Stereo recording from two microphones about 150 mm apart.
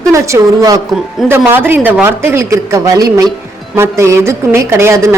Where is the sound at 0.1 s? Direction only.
20° right (ahead or behind).